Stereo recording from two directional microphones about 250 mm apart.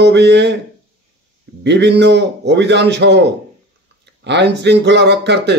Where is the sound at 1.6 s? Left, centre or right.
Right.